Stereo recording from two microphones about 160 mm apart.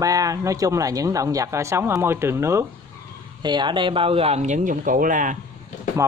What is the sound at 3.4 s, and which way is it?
Speech, 30° right (ahead or behind).